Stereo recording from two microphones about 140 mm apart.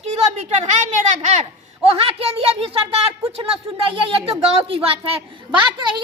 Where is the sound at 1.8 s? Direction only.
45° right (ahead or behind).